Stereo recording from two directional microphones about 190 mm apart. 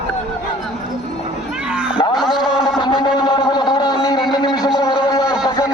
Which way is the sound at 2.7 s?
25° left (ahead or behind).